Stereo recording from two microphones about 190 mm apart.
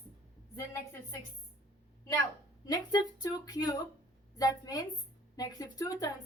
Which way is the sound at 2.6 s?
20° left (ahead or behind).